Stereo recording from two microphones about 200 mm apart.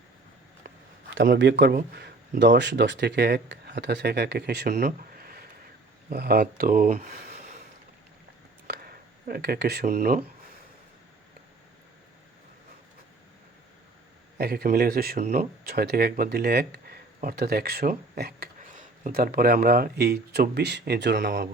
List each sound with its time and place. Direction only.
1.1 s speech: 55° right (ahead or behind)
4.7 s a sound: 45° right (ahead or behind)
6.1 s speech: 50° right (ahead or behind)
8.6 s a sound: 50° right (ahead or behind)
9.8 s speech: 45° right (ahead or behind)
14.3 s speech: 50° right (ahead or behind)
15.2 s speech: 40° right (ahead or behind); by 21.5 s 55° right (ahead or behind)